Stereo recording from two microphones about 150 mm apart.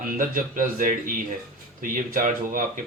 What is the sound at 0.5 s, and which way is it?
Speech, 65° right (ahead or behind).